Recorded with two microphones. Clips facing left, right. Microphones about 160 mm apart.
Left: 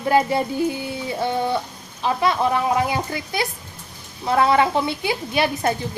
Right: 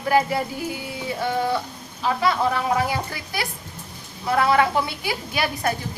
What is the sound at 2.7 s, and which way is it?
A woman's voice, 20° left (ahead or behind).